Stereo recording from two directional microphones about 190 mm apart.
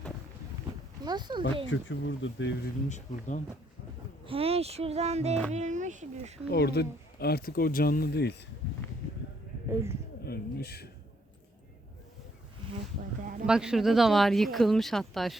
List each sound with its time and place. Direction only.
1.0 s speech: 20° right (ahead or behind)
1.7 s speech: 85° left
2.9 s speech: 40° left (ahead or behind)
4.3 s speech: 30° right (ahead or behind)
6.5 s speech: 60° left (ahead or behind)
9.6 s speech: 15° right (ahead or behind)
10.2 s speech: 55° left (ahead or behind)
13.5 s speech: 5° right (ahead or behind)